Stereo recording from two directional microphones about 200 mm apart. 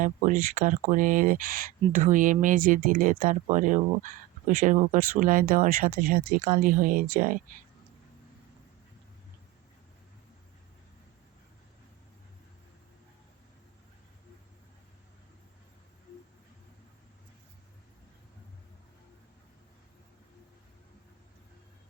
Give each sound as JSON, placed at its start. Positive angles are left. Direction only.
{"t": 0.0, "sound": "speech", "side_deg": -40}